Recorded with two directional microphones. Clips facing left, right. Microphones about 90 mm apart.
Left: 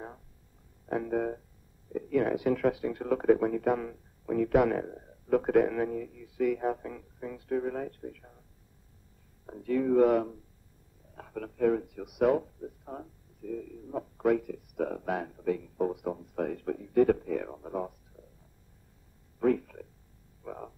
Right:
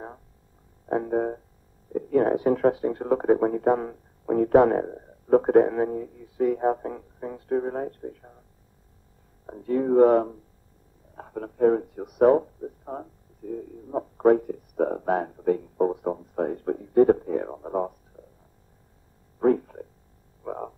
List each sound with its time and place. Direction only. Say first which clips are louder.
0.8 s music: right 5 dB; 35° right (ahead or behind)
1.9 s speech: right 6 dB; 40° right (ahead or behind)
9.5 s speech: right 4 dB; 35° right (ahead or behind)
19.3 s a sound: right 5 dB; 35° right (ahead or behind)
20.4 s frog: right 8 dB; 45° right (ahead or behind)